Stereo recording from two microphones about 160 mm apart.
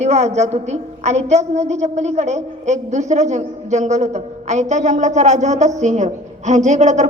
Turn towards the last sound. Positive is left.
turn(degrees=-45)  # may be behind; listen again after turning